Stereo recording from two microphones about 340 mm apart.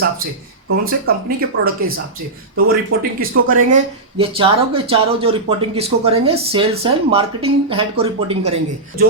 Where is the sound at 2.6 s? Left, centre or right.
Right.